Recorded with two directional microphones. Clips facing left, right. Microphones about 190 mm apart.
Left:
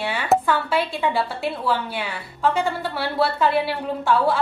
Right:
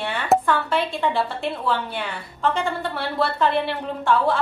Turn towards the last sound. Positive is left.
turn(degrees=5)  # may be behind; listen again after turning